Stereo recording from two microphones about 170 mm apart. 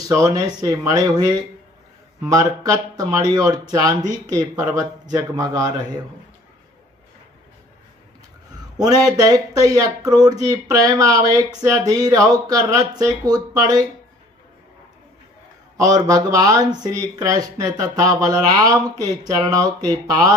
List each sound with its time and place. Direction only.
0.0 s speech: 20° right (ahead or behind)
8.8 s speech: 20° right (ahead or behind)
15.8 s speech: 20° right (ahead or behind)